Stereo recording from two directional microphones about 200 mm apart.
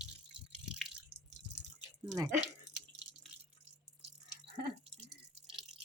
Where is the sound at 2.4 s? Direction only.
20° left (ahead or behind).